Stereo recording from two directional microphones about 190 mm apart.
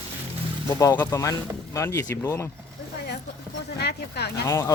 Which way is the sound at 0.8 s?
15° left (ahead or behind).